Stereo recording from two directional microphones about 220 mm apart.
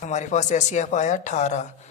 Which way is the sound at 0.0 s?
30° left (ahead or behind).